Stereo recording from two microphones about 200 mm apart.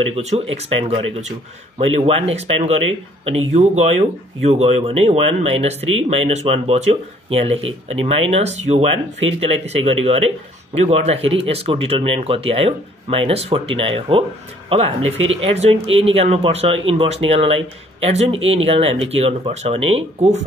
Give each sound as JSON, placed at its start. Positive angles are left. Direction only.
{"t": 0.1, "sound": "speech", "side_deg": -30}